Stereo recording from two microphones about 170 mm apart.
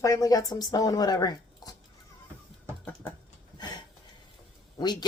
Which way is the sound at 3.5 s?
25° left (ahead or behind).